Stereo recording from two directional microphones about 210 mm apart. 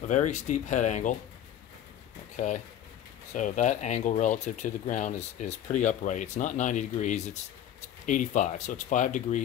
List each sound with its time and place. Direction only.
0.1 s speech: 35° left (ahead or behind)
2.3 s speech: 35° left (ahead or behind)